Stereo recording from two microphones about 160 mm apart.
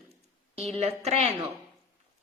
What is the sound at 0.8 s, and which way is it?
Speech, 40° right (ahead or behind).